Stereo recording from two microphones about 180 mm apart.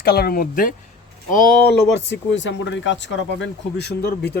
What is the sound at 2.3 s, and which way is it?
Speech, 90° left.